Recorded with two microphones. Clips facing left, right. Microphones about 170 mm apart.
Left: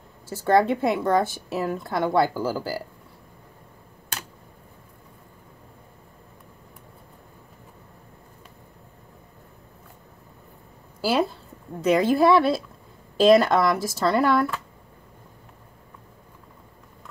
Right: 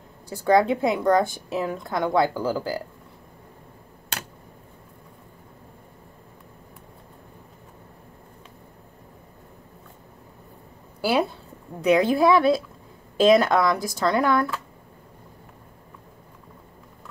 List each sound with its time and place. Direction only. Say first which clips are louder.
0.3 s a woman's voice: right 1 dB; centre (ahead or behind)
11.8 s a woman's voice: even; centre (ahead or behind)